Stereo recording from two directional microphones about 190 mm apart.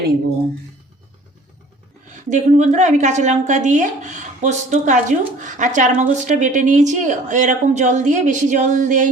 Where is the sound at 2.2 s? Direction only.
40° right (ahead or behind).